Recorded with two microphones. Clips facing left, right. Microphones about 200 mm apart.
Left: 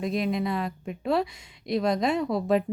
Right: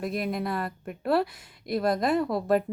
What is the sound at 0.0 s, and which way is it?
A woman's voice, centre (ahead or behind).